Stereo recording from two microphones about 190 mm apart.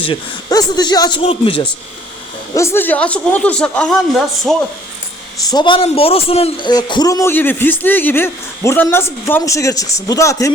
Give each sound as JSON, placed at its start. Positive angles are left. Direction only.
{"t": 0.0, "sound": "speech", "side_deg": 25}
{"t": 2.6, "sound": "a man's voice", "side_deg": 10}
{"t": 5.5, "sound": "a man's voice", "side_deg": 25}